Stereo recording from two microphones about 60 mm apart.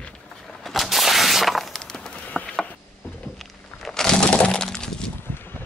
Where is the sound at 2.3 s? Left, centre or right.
Left.